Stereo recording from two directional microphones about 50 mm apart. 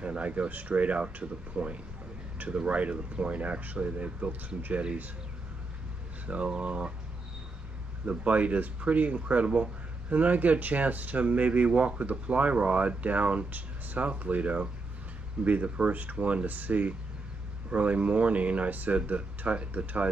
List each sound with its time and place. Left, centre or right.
0.0 s speech: right
6.2 s speech: right
8.0 s speech: right